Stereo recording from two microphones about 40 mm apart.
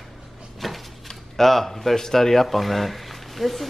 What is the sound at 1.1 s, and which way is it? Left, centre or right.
Speech, centre.